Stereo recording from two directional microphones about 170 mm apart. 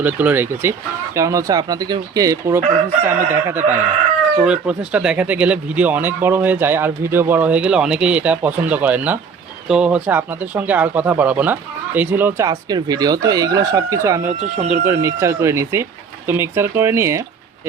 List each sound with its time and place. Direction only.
0.0 s speech: 10° right (ahead or behind)
2.6 s chicken: 50° right (ahead or behind)
4.4 s speech: 5° right (ahead or behind)
12.5 s speech: 25° right (ahead or behind)